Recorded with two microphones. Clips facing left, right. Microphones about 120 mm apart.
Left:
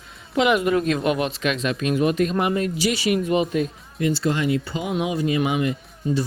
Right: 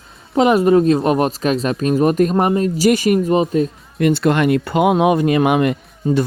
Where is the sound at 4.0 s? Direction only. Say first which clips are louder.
Right 7 dB; 65° right (ahead or behind).